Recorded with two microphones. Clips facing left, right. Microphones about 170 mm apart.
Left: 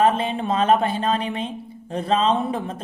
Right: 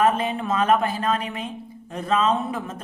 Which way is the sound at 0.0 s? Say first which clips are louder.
Left 1 dB; 25° left (ahead or behind).